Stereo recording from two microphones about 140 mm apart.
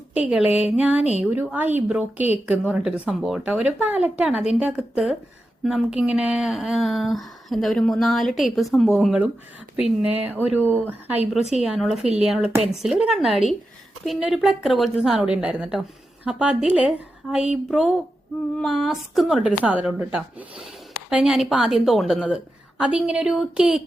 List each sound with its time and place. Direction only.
0.1 s a woman's voice: 10° right (ahead or behind)
12.0 s speech: 50° right (ahead or behind)
12.3 s a woman's voice: 10° right (ahead or behind)